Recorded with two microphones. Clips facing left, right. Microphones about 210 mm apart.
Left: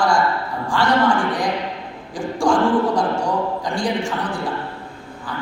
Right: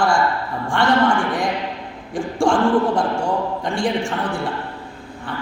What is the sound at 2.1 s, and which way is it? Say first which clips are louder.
A man's voice: even; 25° right (ahead or behind).